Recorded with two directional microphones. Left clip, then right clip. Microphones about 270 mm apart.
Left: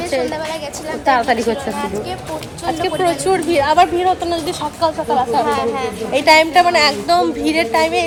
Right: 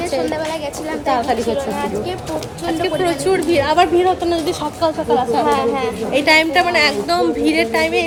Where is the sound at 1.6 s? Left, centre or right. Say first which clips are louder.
Right 1 dB; centre.